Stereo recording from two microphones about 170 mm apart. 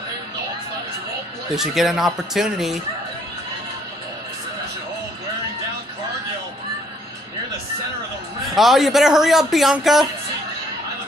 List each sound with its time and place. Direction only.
1.5 s a man's voice: centre (ahead or behind)
8.5 s a man's voice: centre (ahead or behind)